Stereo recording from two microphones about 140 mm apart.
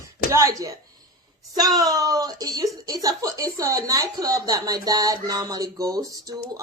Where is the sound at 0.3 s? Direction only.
25° right (ahead or behind).